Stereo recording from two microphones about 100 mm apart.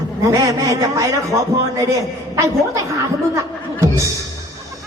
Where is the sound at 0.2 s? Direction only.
35° right (ahead or behind).